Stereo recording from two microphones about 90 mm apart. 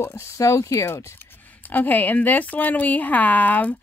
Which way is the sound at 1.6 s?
20° left (ahead or behind).